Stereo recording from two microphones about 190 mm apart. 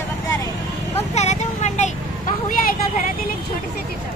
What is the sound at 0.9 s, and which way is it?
Vehicle, 35° left (ahead or behind).